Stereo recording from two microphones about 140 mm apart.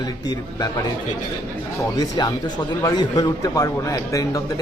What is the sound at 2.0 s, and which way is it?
A man's voice, 30° left (ahead or behind).